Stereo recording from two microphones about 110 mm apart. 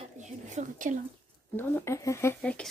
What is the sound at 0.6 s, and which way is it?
Speech, 90° right.